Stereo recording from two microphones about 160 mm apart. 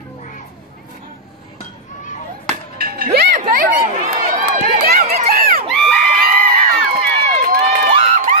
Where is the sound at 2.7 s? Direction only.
65° right (ahead or behind).